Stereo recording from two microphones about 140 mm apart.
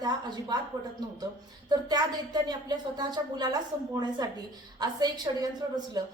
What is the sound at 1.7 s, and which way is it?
A woman's voice, 30° right (ahead or behind).